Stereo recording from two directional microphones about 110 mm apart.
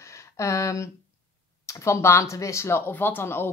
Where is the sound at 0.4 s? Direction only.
30° left (ahead or behind).